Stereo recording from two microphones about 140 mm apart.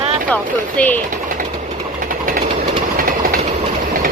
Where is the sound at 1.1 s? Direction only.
75° right (ahead or behind).